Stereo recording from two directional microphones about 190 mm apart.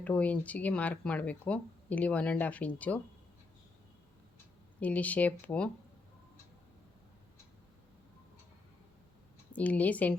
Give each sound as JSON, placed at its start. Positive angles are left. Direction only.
{"t": 0.0, "sound": "speech", "side_deg": 10}
{"t": 4.8, "sound": "speech", "side_deg": 10}
{"t": 9.6, "sound": "speech", "side_deg": 10}